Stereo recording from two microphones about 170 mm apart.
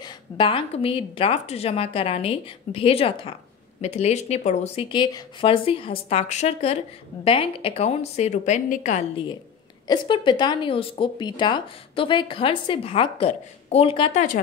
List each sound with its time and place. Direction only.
0.0 s a woman's voice: 30° left (ahead or behind)
4.8 s a woman's voice: 25° left (ahead or behind); by 9.0 s 50° left (ahead or behind)
9.8 s a woman's voice: 30° left (ahead or behind)